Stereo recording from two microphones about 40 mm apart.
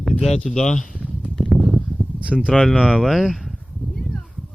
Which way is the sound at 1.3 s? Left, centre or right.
Centre.